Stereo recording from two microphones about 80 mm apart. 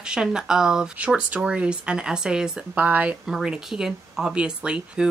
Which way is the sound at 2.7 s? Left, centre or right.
Centre.